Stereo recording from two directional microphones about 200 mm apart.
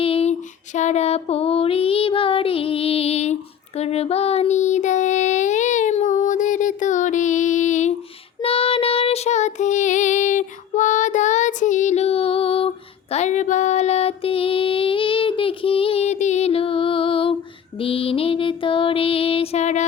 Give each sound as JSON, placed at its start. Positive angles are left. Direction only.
{"t": 0.0, "sound": "female singing", "side_deg": 30}
{"t": 3.8, "sound": "child singing", "side_deg": 30}
{"t": 17.7, "sound": "music", "side_deg": 25}